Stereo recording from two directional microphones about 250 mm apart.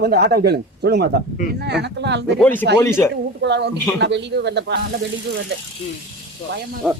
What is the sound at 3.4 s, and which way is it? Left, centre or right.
Speech, right.